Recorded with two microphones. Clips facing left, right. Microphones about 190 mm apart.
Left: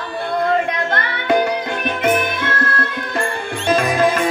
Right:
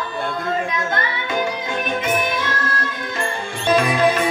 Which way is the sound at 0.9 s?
60° left (ahead or behind).